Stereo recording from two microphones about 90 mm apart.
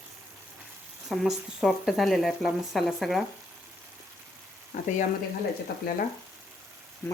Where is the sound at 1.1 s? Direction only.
5° right (ahead or behind).